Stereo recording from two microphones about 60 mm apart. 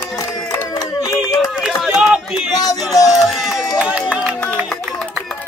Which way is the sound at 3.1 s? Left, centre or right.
Centre.